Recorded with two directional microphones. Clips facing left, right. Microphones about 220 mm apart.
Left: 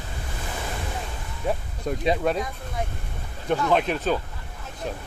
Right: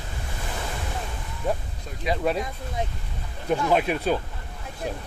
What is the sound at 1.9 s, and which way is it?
Speech, 55° left (ahead or behind).